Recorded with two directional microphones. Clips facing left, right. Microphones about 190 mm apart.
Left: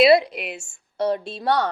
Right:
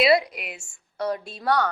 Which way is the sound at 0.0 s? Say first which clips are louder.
Left 5 dB; 25° left (ahead or behind).